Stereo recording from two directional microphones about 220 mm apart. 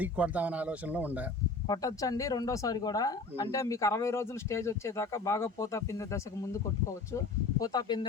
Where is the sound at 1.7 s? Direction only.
15° left (ahead or behind).